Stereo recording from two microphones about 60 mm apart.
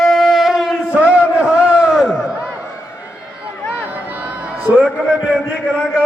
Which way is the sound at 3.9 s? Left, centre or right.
Right.